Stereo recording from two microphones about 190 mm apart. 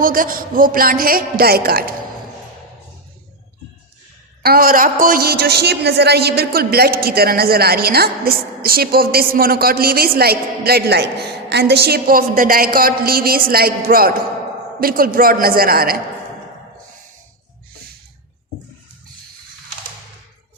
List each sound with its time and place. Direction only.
0.0 s a woman's voice: 45° right (ahead or behind)
4.4 s a woman's voice: 50° right (ahead or behind)